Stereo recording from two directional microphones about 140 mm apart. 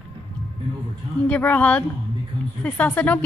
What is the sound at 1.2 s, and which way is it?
Speech, 10° left (ahead or behind).